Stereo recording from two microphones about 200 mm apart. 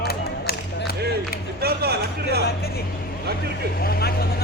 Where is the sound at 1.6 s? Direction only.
50° right (ahead or behind).